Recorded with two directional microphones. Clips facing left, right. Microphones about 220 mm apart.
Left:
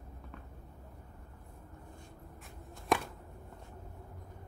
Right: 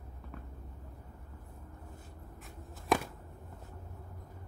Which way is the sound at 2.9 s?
Centre (ahead or behind).